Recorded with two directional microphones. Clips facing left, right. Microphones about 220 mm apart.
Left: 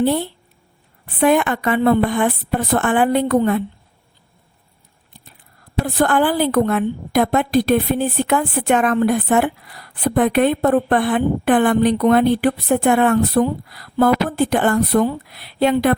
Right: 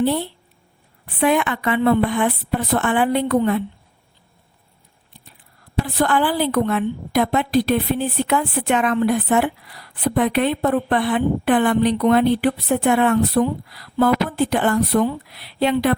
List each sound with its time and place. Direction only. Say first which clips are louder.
0.0 s a woman's voice: left 2 dB; 45° left (ahead or behind)
5.8 s a woman's voice: left 3 dB; 45° left (ahead or behind)